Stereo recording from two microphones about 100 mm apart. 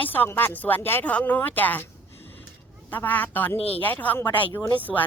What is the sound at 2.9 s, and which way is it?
Speech, 15° left (ahead or behind).